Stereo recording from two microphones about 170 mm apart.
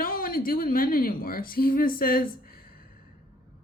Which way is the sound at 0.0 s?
60° left (ahead or behind).